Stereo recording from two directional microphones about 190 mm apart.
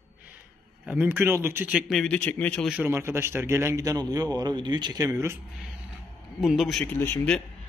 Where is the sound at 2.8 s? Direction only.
15° right (ahead or behind).